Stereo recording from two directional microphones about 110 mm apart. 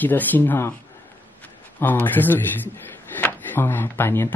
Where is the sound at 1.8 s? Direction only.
15° left (ahead or behind).